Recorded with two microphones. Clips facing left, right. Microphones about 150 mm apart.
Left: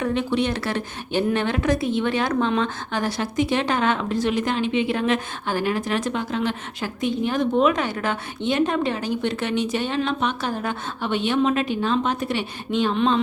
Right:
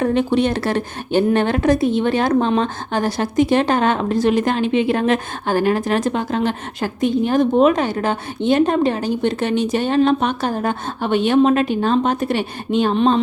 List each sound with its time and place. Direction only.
0.0 s speech: 45° right (ahead or behind)